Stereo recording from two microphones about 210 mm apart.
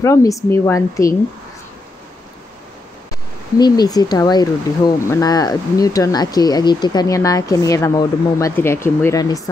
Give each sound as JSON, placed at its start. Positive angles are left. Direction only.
{"t": 0.0, "sound": "speech", "side_deg": 15}
{"t": 3.5, "sound": "speech", "side_deg": 20}